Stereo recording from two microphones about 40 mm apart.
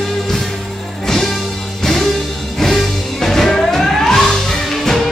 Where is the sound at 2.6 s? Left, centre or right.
Centre.